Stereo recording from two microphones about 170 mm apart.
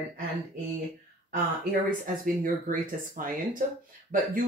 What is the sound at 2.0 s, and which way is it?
Speech, 55° right (ahead or behind).